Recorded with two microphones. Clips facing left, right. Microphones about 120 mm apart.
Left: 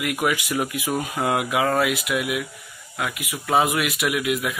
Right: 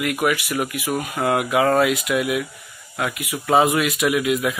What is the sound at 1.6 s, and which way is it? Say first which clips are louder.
Speech: right 6 dB; 5° left (ahead or behind).